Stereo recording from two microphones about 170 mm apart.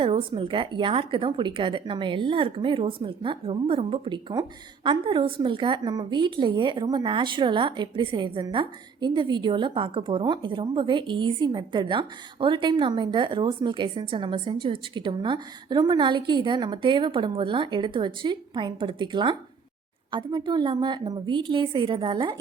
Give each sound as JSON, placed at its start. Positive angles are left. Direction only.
{"t": 0.0, "sound": "a woman's voice", "side_deg": -30}